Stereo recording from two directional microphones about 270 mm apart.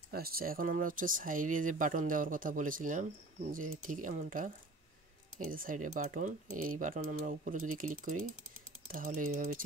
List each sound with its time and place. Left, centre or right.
0.1 s speech: right
5.5 s speech: right